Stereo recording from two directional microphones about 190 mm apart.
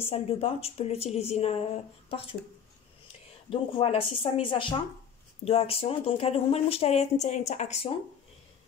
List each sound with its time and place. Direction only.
0.1 s speech: 30° left (ahead or behind)
3.4 s speech: 30° left (ahead or behind)